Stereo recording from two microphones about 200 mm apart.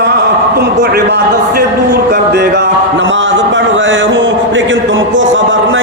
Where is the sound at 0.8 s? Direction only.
55° right (ahead or behind).